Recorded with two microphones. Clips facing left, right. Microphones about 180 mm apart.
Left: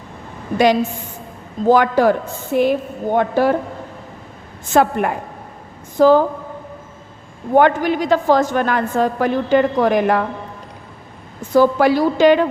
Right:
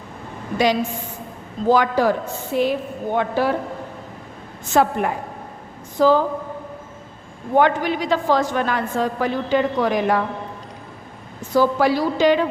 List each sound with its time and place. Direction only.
1.7 s a woman's voice: 55° left (ahead or behind)
4.7 s a woman's voice: 60° left (ahead or behind)
7.5 s a woman's voice: 50° left (ahead or behind)
11.5 s a woman's voice: 55° left (ahead or behind)